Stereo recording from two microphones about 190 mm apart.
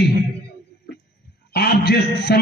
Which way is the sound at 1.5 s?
60° left (ahead or behind).